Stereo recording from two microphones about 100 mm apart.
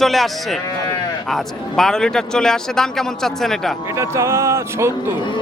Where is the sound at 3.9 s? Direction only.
30° right (ahead or behind).